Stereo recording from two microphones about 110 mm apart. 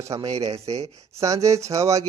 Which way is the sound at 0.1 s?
35° right (ahead or behind).